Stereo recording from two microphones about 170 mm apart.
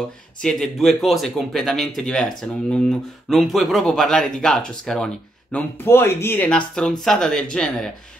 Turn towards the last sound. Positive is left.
turn(degrees=5)  # may be behind; listen again after turning